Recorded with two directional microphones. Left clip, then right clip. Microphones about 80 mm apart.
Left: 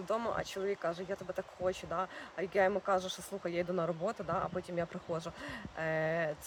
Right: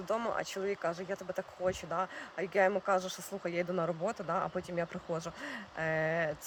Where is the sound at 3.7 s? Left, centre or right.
Centre.